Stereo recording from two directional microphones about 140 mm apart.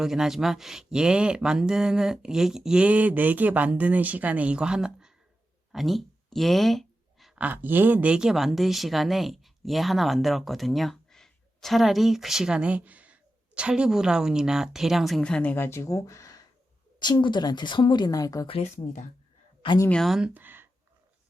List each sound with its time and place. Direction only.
0.0 s speech: 5° right (ahead or behind); by 18.4 s 25° left (ahead or behind)
18.4 s speech: 45° left (ahead or behind)
19.9 s speech: centre (ahead or behind)